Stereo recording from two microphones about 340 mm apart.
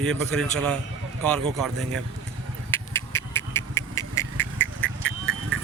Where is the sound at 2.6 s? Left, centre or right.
Centre.